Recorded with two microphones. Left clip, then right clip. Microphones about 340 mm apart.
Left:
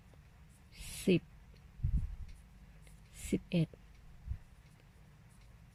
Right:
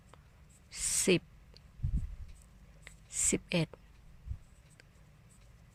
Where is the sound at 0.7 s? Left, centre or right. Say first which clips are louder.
Right 4 dB; centre.